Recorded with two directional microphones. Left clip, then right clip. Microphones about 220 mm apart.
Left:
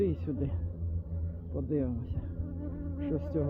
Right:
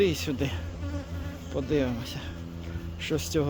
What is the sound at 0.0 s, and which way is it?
Speech, 20° right (ahead or behind).